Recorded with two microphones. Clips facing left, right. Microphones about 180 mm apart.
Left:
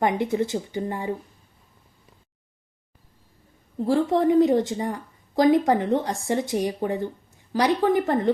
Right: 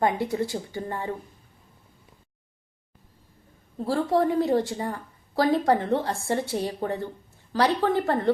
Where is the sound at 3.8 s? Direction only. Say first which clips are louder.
Left 2 dB; 20° left (ahead or behind).